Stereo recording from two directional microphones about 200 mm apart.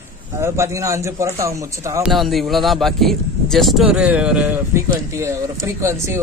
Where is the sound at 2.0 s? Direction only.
Centre (ahead or behind).